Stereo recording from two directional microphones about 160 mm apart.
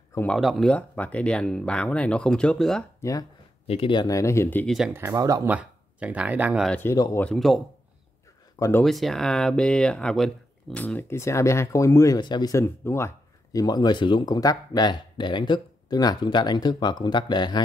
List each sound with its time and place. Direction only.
0.1 s speech: 10° left (ahead or behind)
0.4 s speech: centre (ahead or behind)
3.0 s speech: 20° left (ahead or behind)
3.6 s speech: 35° left (ahead or behind); by 4.7 s 10° left (ahead or behind)
4.9 s speech: 20° right (ahead or behind)
5.5 s speech: 10° right (ahead or behind)
6.7 s speech: 15° left (ahead or behind)
7.2 s speech: centre (ahead or behind)
8.5 s speech: 20° left (ahead or behind)
8.8 s speech: centre (ahead or behind); by 17.6 s 30° left (ahead or behind)